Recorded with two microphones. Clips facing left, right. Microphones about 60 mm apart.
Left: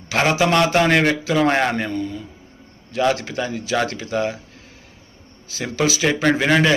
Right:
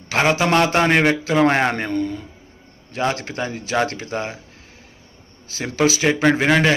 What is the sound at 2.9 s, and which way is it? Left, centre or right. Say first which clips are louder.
A man's voice: left 3 dB; right.